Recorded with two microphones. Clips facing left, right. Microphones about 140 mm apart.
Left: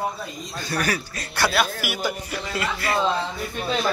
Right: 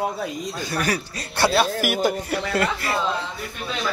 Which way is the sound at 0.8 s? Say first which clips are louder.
Right 1 dB; 30° right (ahead or behind).